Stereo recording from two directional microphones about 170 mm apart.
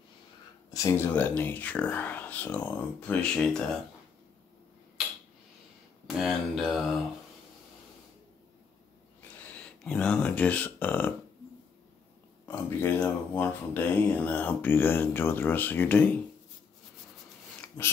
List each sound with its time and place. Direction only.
0.7 s speech: 15° left (ahead or behind)
6.0 s speech: centre (ahead or behind)
9.8 s speech: 10° left (ahead or behind)
12.4 s speech: 15° left (ahead or behind)
17.6 s a sound: 15° left (ahead or behind)